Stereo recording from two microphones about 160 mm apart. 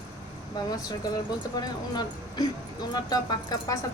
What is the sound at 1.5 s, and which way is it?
A woman's voice, 25° left (ahead or behind).